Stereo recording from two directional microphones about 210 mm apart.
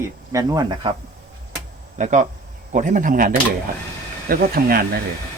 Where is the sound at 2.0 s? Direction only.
35° right (ahead or behind).